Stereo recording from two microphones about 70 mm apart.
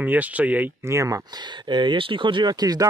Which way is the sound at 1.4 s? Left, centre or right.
Right.